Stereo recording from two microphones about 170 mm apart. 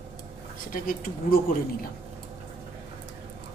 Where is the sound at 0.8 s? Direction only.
60° left (ahead or behind).